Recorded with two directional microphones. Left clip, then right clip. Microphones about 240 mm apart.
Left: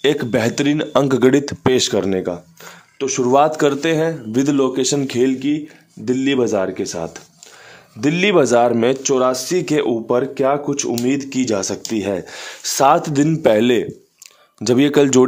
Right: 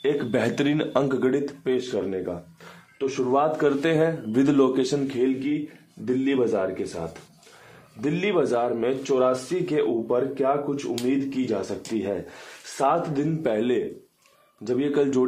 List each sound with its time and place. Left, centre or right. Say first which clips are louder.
0.0 s speech: left 7 dB; left
0.3 s speech: left 6 dB; left
3.8 s speech: left 4 dB; left
4.9 s speech: left 6 dB; left